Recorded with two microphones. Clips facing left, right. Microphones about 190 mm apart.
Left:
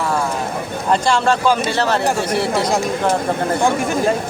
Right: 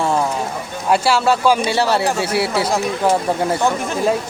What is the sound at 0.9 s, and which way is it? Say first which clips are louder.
Speech: right 1 dB; 10° right (ahead or behind).